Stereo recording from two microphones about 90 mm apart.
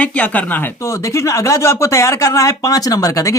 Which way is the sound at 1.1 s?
35° left (ahead or behind).